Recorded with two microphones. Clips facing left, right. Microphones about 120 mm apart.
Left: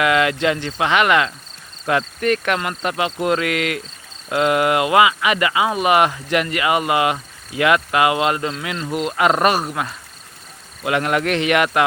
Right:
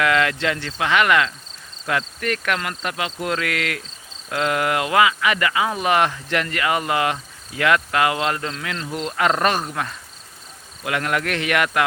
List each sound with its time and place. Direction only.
0.0 s speech: 15° left (ahead or behind)
10.8 s speech: 25° left (ahead or behind)